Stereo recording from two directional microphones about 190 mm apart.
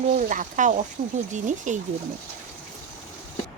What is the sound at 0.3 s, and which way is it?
Speech, 40° right (ahead or behind).